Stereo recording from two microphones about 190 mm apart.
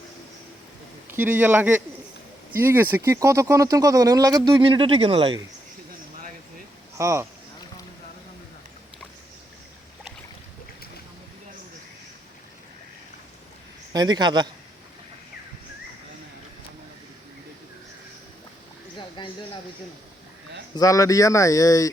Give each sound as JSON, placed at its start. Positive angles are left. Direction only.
{"t": 1.1, "sound": "speech", "side_deg": -10}
{"t": 6.9, "sound": "speech", "side_deg": -15}
{"t": 13.9, "sound": "speech", "side_deg": -20}
{"t": 18.9, "sound": "a sound", "side_deg": 25}
{"t": 20.7, "sound": "speech", "side_deg": 20}